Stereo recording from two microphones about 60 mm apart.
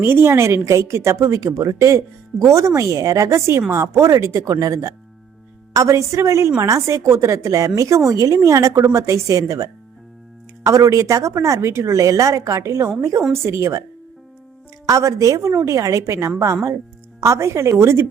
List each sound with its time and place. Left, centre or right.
0.0 s a woman's voice: right
5.7 s speech: right
10.7 s a woman's voice: right
13.3 s a woman's voice: right
14.8 s a woman's voice: right